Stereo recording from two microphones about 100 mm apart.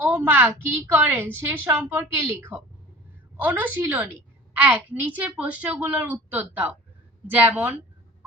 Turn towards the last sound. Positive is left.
turn(degrees=-20)  # may be behind; listen again after turning